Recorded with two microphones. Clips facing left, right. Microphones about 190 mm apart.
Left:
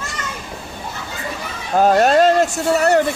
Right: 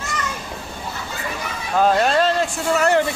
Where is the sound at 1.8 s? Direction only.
45° left (ahead or behind).